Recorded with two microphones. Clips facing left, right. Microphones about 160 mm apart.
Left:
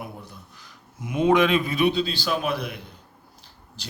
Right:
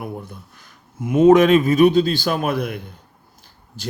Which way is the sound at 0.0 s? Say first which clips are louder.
Right 7 dB; 55° right (ahead or behind).